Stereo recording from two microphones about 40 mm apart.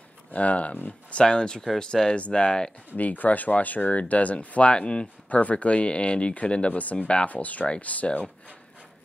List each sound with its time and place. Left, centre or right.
0.3 s speech: left
1.2 s speech: left
3.0 s speech: left
4.6 s speech: left